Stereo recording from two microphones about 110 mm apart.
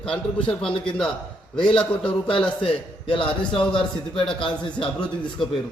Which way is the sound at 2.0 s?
55° left (ahead or behind).